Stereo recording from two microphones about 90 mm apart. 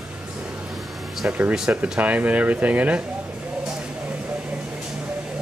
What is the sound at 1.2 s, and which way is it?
Speech, 15° right (ahead or behind).